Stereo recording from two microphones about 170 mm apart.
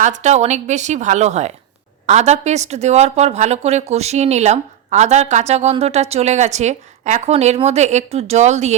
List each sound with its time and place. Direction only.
0.0 s speech: 45° right (ahead or behind)